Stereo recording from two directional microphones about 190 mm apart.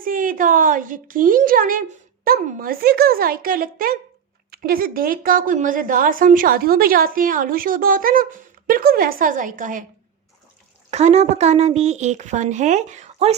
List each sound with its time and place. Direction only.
0.0 s a woman's voice: 45° right (ahead or behind)
10.9 s a woman's voice: 35° right (ahead or behind)